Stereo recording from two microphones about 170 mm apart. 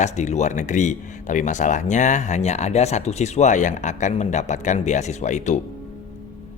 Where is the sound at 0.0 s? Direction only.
45° left (ahead or behind).